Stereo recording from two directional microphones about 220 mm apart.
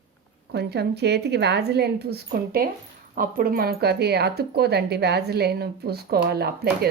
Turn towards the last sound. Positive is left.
turn(degrees=-45)  # may be behind; listen again after turning